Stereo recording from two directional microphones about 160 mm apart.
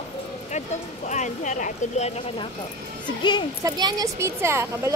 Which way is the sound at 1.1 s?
50° left (ahead or behind).